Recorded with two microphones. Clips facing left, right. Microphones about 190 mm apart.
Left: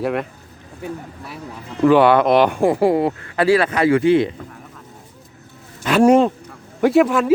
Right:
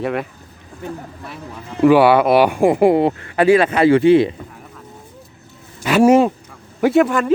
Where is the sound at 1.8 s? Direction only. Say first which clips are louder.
Right 1 dB; 10° right (ahead or behind); by 4.3 s 25° right (ahead or behind).